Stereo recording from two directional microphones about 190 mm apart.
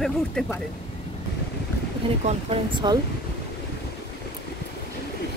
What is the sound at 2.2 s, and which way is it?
Speech, 25° right (ahead or behind).